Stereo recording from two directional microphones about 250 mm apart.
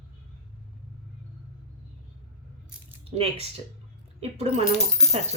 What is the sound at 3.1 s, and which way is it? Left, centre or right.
A woman's voice, right.